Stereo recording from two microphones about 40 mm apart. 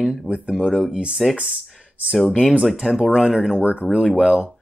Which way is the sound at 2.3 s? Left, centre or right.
Centre.